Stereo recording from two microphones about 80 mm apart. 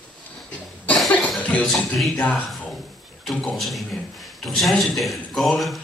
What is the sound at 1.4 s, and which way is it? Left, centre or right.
Music, centre.